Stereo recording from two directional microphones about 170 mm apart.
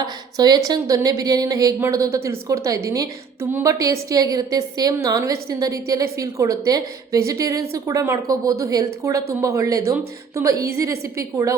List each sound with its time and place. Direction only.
0.0 s a woman's voice: 25° right (ahead or behind)